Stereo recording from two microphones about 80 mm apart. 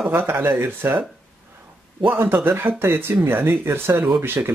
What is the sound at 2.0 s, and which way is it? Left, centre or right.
Speech, right.